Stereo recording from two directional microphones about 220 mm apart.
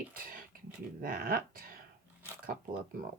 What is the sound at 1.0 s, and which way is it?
Speech, 40° right (ahead or behind).